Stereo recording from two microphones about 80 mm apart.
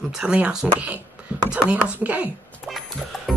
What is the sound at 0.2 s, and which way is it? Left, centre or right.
Speech, centre.